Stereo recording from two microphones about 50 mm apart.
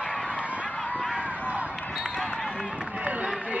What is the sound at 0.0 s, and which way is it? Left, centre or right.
Honk, left.